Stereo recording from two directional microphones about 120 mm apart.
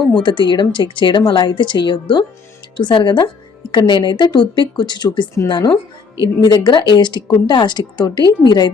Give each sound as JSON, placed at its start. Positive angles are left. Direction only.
{"t": 0.2, "sound": "speech", "side_deg": 40}